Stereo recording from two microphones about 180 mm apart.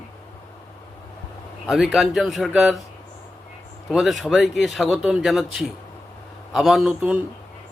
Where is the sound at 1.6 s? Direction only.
5° right (ahead or behind).